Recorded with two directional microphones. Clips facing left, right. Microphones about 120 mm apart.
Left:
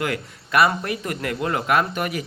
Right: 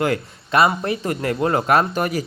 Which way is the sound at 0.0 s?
30° right (ahead or behind).